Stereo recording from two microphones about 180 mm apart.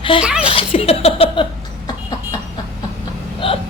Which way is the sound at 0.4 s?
30° left (ahead or behind).